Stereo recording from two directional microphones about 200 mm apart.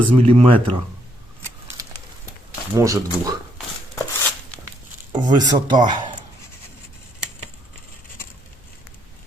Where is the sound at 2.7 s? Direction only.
15° right (ahead or behind).